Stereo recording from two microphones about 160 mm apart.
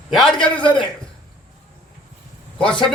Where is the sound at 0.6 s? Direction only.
30° left (ahead or behind).